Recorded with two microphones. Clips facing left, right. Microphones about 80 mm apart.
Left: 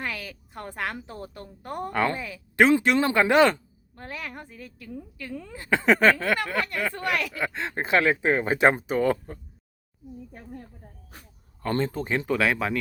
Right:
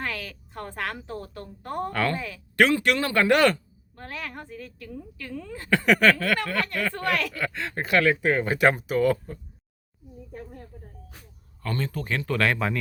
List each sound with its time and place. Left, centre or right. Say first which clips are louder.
0.0 s a sound: right 1 dB; centre
1.0 s speech: right 3 dB; left
11.6 s speech: left 4 dB; left
12.4 s speech: even; centre